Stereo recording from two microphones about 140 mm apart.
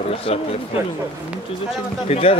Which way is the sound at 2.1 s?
45° left (ahead or behind).